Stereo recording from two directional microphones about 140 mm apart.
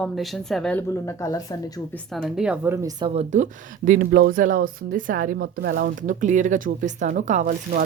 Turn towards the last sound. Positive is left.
turn(degrees=-60)  # may be behind; listen again after turning